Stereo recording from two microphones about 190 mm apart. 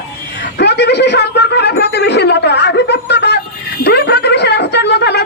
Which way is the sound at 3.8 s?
60° left (ahead or behind).